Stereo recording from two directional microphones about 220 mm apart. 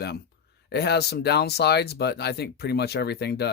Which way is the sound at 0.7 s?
50° left (ahead or behind).